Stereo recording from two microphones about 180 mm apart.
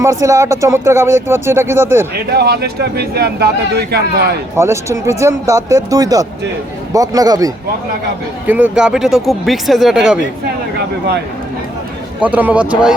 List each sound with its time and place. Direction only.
0.0 s speech: 15° right (ahead or behind)
2.3 s speech: 60° right (ahead or behind)
4.5 s a man's voice: 15° right (ahead or behind)
8.4 s speech: 5° right (ahead or behind)
12.2 s speech: 10° right (ahead or behind)